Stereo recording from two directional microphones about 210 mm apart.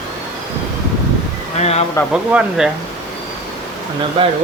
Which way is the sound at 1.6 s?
30° left (ahead or behind).